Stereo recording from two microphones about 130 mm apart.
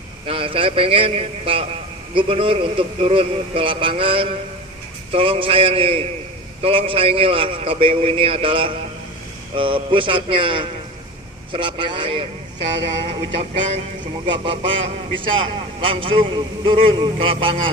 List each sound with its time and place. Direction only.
0.3 s a man's voice: 45° right (ahead or behind)
14.3 s a man's voice: 40° right (ahead or behind)